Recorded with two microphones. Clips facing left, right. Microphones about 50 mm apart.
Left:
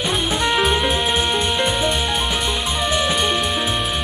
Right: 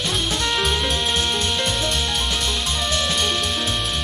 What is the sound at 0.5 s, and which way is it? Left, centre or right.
Music, centre.